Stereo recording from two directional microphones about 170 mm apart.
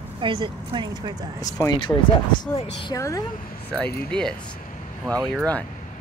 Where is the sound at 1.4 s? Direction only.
20° left (ahead or behind).